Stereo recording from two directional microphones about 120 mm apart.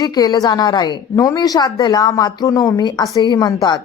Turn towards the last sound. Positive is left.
turn(degrees=35)  # may be behind; listen again after turning